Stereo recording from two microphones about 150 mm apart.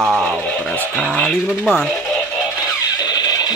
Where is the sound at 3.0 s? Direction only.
25° left (ahead or behind).